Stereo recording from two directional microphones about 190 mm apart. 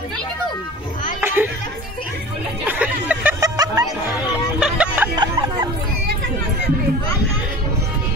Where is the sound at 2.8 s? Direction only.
10° right (ahead or behind).